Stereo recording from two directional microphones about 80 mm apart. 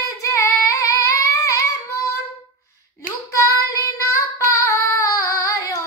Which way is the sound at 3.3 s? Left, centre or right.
Left.